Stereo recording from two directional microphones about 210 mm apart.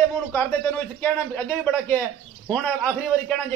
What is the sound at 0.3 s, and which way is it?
A man's voice, 10° left (ahead or behind).